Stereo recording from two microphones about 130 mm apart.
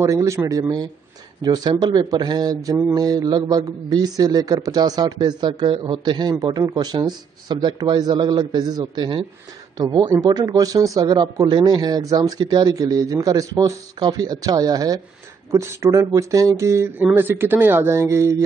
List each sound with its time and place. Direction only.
0.0 s a man's voice: 25° right (ahead or behind)